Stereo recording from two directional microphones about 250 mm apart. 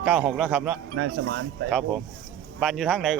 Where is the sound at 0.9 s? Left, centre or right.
Right.